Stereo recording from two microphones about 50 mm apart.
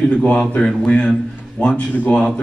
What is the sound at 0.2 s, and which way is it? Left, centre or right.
Speech, left.